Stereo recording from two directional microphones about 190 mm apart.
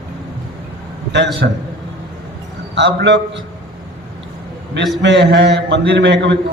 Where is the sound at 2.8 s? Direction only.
65° right (ahead or behind).